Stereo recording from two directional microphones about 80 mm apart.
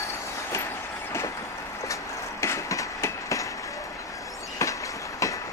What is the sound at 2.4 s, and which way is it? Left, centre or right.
Train, left.